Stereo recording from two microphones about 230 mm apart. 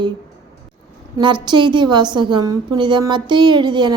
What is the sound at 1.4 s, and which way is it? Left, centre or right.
A woman's voice, centre.